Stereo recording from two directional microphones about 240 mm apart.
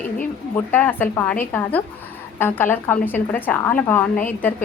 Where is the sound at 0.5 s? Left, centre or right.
Centre.